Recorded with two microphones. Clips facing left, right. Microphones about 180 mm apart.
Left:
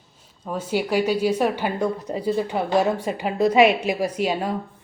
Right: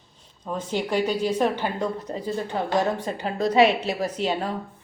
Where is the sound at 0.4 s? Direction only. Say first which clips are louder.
Left 3 dB; 10° left (ahead or behind).